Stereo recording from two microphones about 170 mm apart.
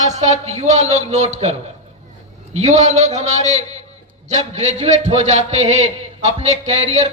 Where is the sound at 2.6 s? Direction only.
45° right (ahead or behind).